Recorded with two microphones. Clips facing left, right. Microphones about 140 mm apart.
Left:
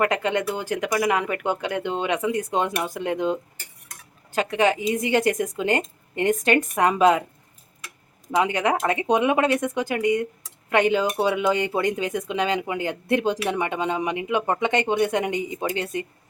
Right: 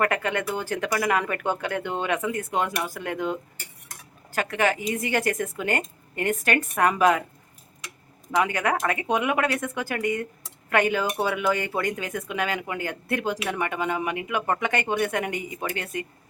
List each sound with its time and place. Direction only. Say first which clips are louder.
0.0 s speech: left 3 dB; 20° left (ahead or behind)
8.4 s speech: left 2 dB; 20° left (ahead or behind)